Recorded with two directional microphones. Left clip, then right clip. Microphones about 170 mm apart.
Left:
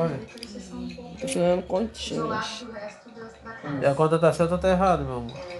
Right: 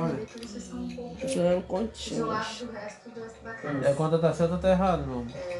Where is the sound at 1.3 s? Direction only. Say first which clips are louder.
Left 3 dB; 45° left (ahead or behind).